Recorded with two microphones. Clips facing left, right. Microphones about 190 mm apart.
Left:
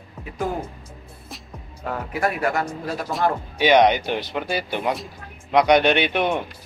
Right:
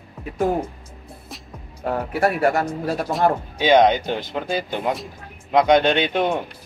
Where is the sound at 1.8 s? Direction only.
30° right (ahead or behind).